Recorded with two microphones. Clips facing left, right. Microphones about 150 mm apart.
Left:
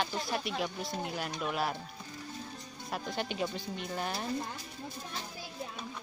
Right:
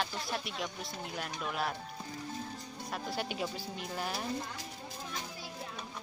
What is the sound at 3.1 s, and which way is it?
Speech, 5° right (ahead or behind).